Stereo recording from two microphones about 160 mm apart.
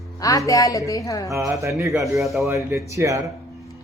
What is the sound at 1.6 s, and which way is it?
Speech, 20° right (ahead or behind).